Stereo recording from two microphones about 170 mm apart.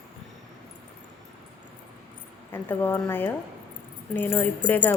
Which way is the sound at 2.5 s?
10° left (ahead or behind).